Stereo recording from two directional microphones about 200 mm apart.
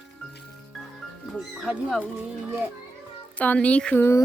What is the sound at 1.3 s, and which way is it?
Speech, centre (ahead or behind).